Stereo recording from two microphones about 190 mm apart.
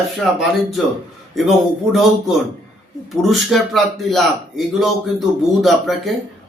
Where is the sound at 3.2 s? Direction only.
Centre (ahead or behind).